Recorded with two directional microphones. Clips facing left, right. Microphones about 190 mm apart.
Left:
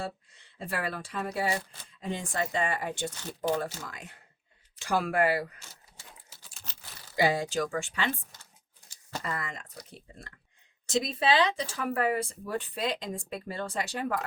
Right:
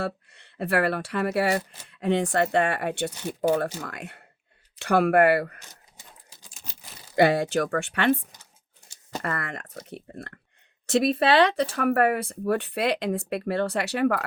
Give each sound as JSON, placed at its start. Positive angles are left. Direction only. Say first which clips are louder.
{"t": 0.0, "sound": "speech", "louder": "right 7 dB", "side_deg": -65}
{"t": 6.0, "sound": "typing", "louder": "even", "side_deg": -15}
{"t": 7.2, "sound": "speech", "louder": "right 6 dB", "side_deg": -65}
{"t": 9.2, "sound": "speech", "louder": "right 6 dB", "side_deg": -65}